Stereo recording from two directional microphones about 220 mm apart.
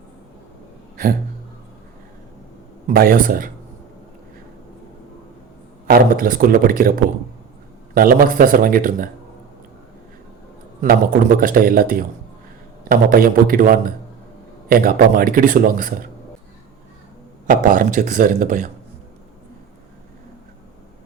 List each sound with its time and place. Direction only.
2.8 s a man's voice: 40° right (ahead or behind)
5.9 s a man's voice: 40° right (ahead or behind)
10.8 s a man's voice: 40° right (ahead or behind)
17.4 s a man's voice: 35° right (ahead or behind)